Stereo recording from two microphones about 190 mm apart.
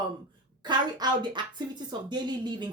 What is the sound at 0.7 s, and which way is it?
Speech, 25° right (ahead or behind).